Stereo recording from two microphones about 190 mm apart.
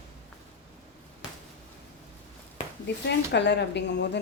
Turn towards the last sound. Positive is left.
turn(degrees=65)  # may be behind; listen again after turning